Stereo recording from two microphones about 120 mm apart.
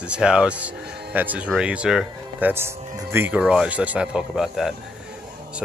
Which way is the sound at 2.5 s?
20° right (ahead or behind).